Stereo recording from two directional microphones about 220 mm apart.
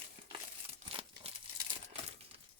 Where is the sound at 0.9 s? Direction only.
25° right (ahead or behind).